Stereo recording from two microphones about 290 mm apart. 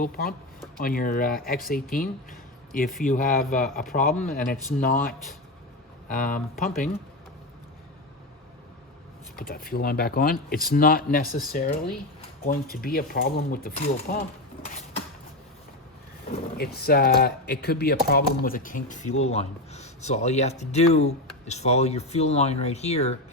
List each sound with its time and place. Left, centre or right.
0.0 s speech: left
6.1 s speech: left
9.3 s speech: left
16.6 s speech: left